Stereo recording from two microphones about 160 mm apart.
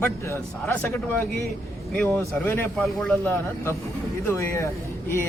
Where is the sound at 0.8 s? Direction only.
10° left (ahead or behind).